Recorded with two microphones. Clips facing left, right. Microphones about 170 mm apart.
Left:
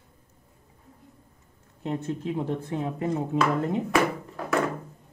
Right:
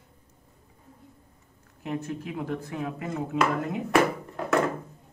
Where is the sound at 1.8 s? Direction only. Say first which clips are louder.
Left 2 dB; 30° left (ahead or behind).